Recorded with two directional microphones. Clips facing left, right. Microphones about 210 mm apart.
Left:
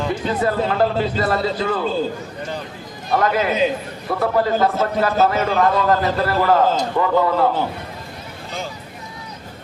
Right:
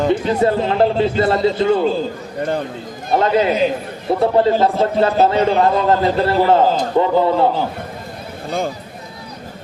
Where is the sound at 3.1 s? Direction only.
25° right (ahead or behind).